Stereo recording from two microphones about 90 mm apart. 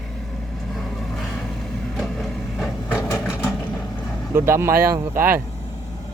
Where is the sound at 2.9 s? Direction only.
30° left (ahead or behind).